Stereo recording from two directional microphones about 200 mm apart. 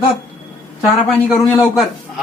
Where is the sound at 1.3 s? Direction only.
Centre (ahead or behind).